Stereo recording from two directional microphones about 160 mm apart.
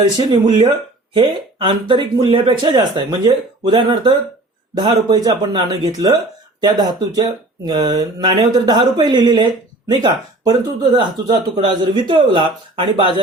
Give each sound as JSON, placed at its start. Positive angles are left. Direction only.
{"t": 0.3, "sound": "speech", "side_deg": -25}